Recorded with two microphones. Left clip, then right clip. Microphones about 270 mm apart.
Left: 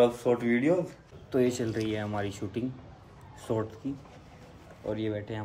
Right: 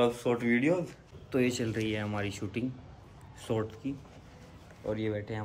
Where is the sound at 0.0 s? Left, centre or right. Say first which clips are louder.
Left 4 dB; centre.